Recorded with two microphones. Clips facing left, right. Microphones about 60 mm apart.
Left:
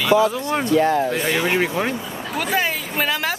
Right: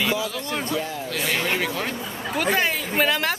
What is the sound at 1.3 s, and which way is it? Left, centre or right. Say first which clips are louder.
Speech: left 4 dB; centre.